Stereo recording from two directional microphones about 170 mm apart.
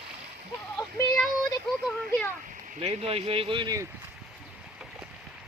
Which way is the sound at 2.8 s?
35° right (ahead or behind).